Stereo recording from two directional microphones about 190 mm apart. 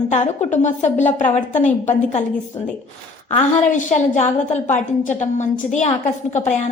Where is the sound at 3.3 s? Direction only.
40° left (ahead or behind).